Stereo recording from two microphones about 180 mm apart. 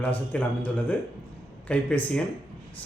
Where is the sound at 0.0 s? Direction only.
10° left (ahead or behind).